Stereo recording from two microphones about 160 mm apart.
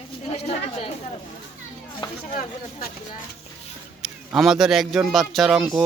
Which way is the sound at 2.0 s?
30° left (ahead or behind).